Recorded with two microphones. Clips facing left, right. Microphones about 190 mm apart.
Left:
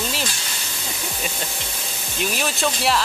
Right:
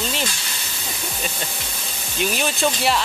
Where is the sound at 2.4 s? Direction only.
Centre (ahead or behind).